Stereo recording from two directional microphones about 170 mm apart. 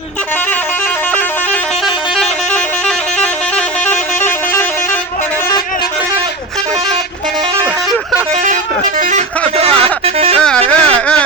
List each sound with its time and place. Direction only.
2.1 s vehicle horn: centre (ahead or behind)
9.0 s vehicle: 45° right (ahead or behind)
10.4 s a sound: 5° left (ahead or behind)